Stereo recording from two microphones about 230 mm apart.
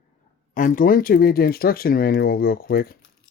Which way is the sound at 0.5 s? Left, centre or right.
Left.